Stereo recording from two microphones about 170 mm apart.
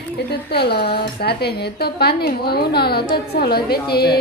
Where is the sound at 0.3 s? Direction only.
70° left (ahead or behind).